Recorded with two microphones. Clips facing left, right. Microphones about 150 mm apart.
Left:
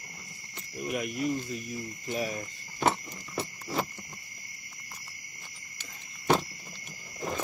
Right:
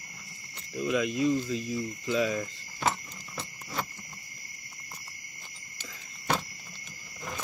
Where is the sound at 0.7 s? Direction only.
90° right.